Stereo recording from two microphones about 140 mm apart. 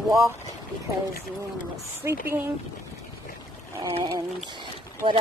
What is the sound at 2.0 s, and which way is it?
Speech, 20° right (ahead or behind).